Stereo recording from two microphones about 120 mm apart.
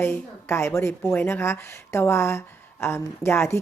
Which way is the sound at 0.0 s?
20° left (ahead or behind).